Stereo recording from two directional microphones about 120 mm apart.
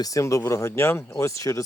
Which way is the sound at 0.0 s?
25° left (ahead or behind).